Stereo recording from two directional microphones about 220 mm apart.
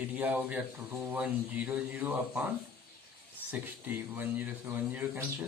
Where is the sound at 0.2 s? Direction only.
5° right (ahead or behind).